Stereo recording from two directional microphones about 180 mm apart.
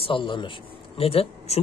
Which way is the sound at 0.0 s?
30° left (ahead or behind).